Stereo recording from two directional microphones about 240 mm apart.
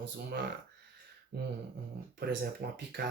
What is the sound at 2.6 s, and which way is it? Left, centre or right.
Speech, right.